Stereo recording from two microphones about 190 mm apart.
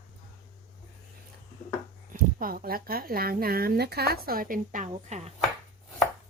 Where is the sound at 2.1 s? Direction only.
50° right (ahead or behind).